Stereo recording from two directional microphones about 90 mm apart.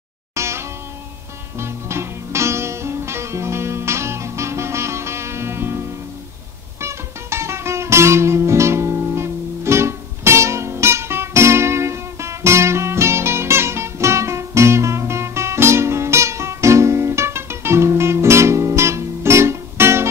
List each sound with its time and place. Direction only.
0.3 s music: 30° right (ahead or behind)